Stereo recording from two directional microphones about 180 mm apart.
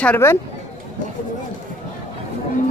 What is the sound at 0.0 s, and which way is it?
Speech, 10° left (ahead or behind).